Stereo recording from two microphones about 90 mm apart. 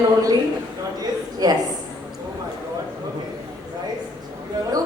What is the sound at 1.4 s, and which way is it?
Speech, 45° right (ahead or behind).